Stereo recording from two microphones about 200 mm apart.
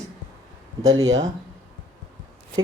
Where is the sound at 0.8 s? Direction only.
75° right (ahead or behind).